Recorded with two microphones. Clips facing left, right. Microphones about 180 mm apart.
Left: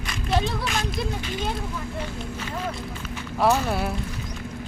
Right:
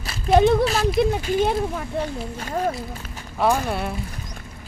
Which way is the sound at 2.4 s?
45° right (ahead or behind).